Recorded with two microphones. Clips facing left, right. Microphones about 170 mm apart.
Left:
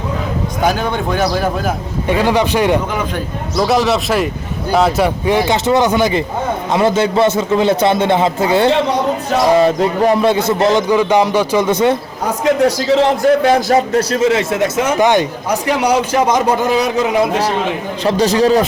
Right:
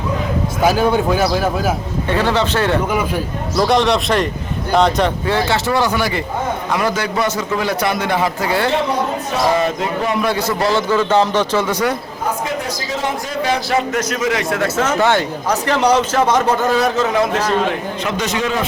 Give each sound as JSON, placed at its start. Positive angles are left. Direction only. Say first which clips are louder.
{"t": 0.6, "sound": "a man's voice", "louder": "right 3 dB", "side_deg": -5}
{"t": 2.0, "sound": "speech", "louder": "left 3 dB", "side_deg": 15}
{"t": 3.6, "sound": "a man's voice", "louder": "left 1 dB", "side_deg": 5}
{"t": 10.0, "sound": "a man's voice", "louder": "left 7 dB", "side_deg": 35}
{"t": 10.2, "sound": "a man's voice", "louder": "left 5 dB", "side_deg": 20}
{"t": 12.6, "sound": "a man's voice", "louder": "left 10 dB", "side_deg": 65}
{"t": 13.9, "sound": "speech", "louder": "left 5 dB", "side_deg": 30}
{"t": 18.0, "sound": "a man's voice", "louder": "left 10 dB", "side_deg": 35}